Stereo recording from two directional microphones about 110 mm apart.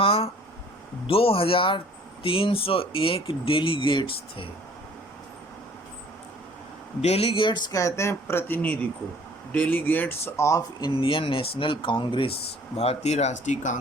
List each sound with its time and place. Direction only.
0.0 s a sound: 60° left (ahead or behind)
1.0 s speech: 60° left (ahead or behind)
7.0 s speech: 65° left (ahead or behind); by 7.6 s 50° left (ahead or behind)
7.7 s speech: 30° left (ahead or behind)
10.9 s speech: 55° left (ahead or behind); by 13.7 s 90° left